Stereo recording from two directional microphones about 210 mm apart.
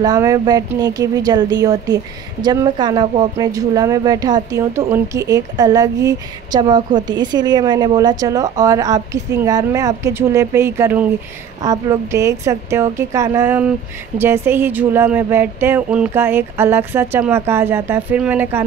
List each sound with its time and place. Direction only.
0.0 s speech: 15° right (ahead or behind)